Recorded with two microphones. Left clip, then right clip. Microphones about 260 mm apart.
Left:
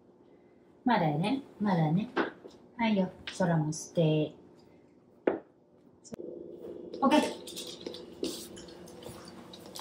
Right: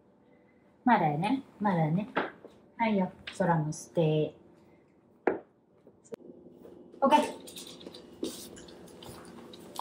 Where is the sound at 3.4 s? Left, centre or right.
Centre.